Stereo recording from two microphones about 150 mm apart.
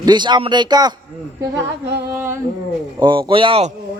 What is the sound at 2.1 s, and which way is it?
Speech, 15° right (ahead or behind).